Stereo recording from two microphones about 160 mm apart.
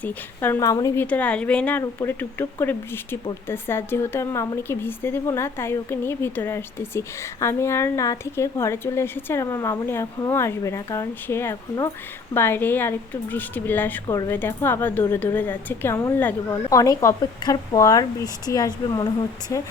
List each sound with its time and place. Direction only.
0.0 s speech: 15° left (ahead or behind)
1.0 s speech: 10° left (ahead or behind)
14.1 s speech: 20° left (ahead or behind)